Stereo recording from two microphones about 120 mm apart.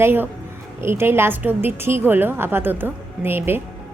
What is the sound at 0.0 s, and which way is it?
A woman's voice, 20° right (ahead or behind).